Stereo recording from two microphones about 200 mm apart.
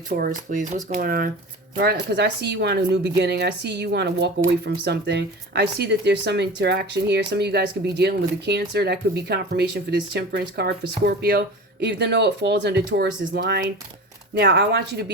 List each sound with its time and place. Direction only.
0.1 s speech: 40° right (ahead or behind); by 15.1 s 55° right (ahead or behind)